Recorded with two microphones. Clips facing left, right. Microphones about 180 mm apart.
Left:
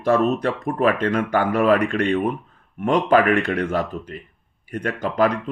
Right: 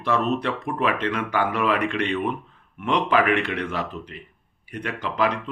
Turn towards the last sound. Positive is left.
turn(degrees=45)  # may be behind; listen again after turning